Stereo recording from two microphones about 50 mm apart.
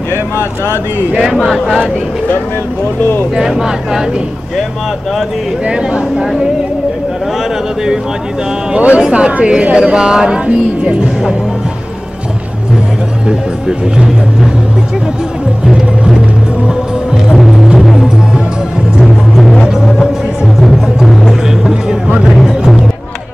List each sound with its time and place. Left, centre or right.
1.1 s speech: centre
1.4 s speech: centre
3.3 s speech: centre
5.7 s speech: centre
8.9 s speech: centre
13.3 s speech: centre
17.3 s music: centre
20.6 s music: centre
21.3 s music: centre